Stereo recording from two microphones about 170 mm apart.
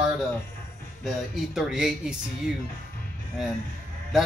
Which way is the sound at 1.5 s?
5° right (ahead or behind).